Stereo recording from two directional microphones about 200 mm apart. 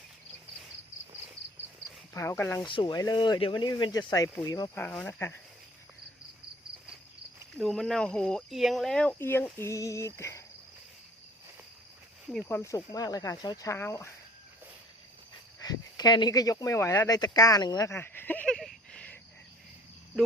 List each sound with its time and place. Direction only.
2.1 s speech: 15° left (ahead or behind)
2.6 s speech: 25° left (ahead or behind)
7.5 s speech: centre (ahead or behind)
12.3 s speech: 5° left (ahead or behind)
15.6 s speech: 20° left (ahead or behind); by 19.1 s 5° left (ahead or behind)